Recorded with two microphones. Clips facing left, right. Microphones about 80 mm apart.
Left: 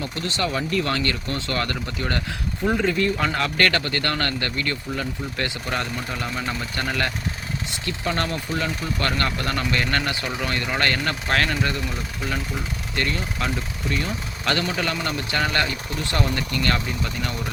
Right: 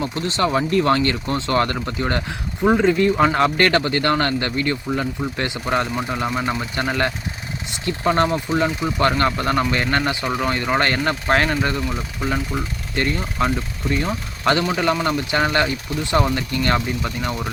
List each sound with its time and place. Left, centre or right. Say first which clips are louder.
0.0 s speech: right 5 dB; right
6.1 s speech: right 5 dB; right
13.0 s speech: right 5 dB; right